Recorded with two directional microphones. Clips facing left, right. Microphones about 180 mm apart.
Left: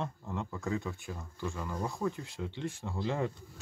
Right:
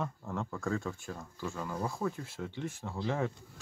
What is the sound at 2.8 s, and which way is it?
Speech, centre (ahead or behind).